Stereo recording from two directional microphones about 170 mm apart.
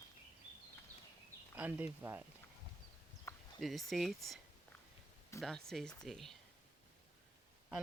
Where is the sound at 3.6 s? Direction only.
Centre (ahead or behind).